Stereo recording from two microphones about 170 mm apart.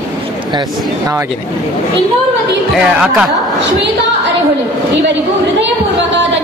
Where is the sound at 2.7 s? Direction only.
5° right (ahead or behind).